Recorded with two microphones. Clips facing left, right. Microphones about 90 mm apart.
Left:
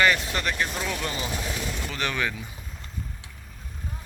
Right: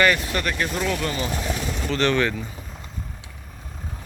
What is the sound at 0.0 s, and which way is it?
Speech, 20° left (ahead or behind).